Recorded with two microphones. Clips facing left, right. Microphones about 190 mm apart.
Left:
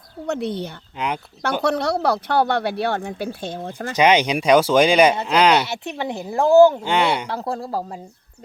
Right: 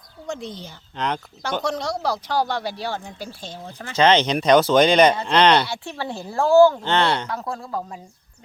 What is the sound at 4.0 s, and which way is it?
Speech, 10° left (ahead or behind).